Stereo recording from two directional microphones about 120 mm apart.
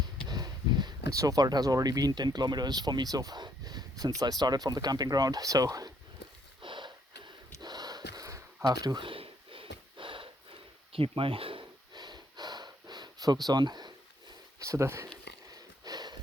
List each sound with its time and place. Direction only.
0.0 s speech: 35° right (ahead or behind)
6.6 s snort: 40° right (ahead or behind)
14.6 s speech: 25° right (ahead or behind)
15.8 s a sound: 35° right (ahead or behind)